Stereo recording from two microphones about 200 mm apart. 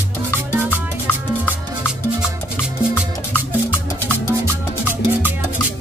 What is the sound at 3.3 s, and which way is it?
Music, 10° left (ahead or behind).